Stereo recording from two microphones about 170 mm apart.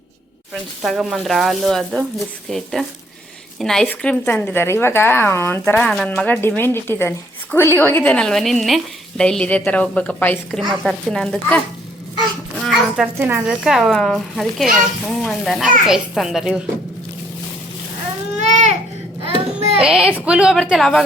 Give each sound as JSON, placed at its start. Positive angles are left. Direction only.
{"t": 0.8, "sound": "a child's voice", "side_deg": 0}
{"t": 12.6, "sound": "a sound", "side_deg": 0}
{"t": 13.1, "sound": "a child's voice", "side_deg": -10}
{"t": 18.3, "sound": "baby cry", "side_deg": -45}
{"t": 19.2, "sound": "a sound", "side_deg": -35}
{"t": 19.8, "sound": "a child's voice", "side_deg": -5}